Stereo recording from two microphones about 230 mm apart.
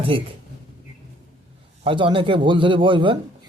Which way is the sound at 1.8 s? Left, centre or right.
Right.